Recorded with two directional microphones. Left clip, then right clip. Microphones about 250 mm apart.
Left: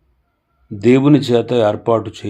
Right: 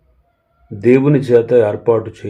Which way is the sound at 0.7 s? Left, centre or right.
Left.